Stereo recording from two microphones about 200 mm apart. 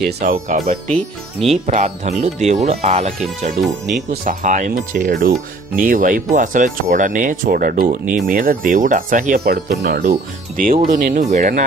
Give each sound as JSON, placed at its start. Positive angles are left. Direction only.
{"t": 0.0, "sound": "speech", "side_deg": -45}
{"t": 0.9, "sound": "speech", "side_deg": 0}
{"t": 1.7, "sound": "speech", "side_deg": -35}
{"t": 3.6, "sound": "speech", "side_deg": 0}
{"t": 4.1, "sound": "speech", "side_deg": -45}
{"t": 10.0, "sound": "speech", "side_deg": -40}